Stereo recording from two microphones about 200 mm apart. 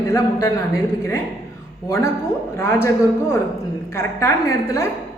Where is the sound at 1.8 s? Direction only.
15° left (ahead or behind).